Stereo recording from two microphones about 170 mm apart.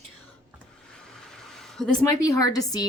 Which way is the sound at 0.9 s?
5° left (ahead or behind).